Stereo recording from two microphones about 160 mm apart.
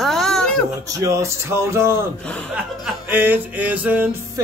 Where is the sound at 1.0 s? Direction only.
20° right (ahead or behind).